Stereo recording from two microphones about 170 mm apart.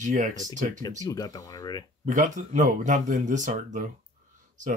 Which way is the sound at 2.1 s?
45° right (ahead or behind).